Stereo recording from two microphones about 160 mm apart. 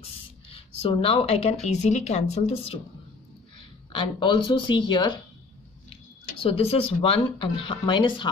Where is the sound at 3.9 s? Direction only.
30° left (ahead or behind).